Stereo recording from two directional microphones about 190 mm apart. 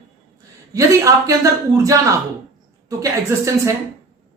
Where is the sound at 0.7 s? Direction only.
15° right (ahead or behind).